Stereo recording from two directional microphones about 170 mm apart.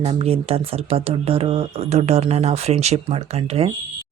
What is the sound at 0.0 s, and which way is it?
A woman's voice, 35° right (ahead or behind).